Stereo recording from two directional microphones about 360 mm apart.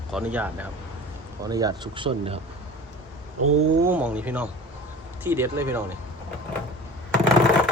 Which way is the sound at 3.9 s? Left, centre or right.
Centre.